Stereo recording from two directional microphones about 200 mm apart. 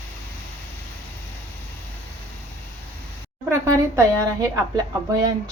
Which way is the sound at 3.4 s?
15° right (ahead or behind).